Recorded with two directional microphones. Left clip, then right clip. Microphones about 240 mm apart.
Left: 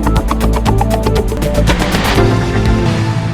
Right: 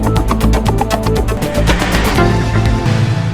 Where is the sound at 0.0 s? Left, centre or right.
Centre.